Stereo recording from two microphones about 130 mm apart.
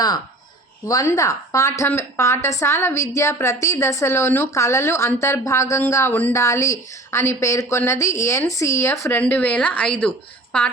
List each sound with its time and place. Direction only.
0.9 s a woman's voice: 25° left (ahead or behind); by 10.1 s 5° left (ahead or behind)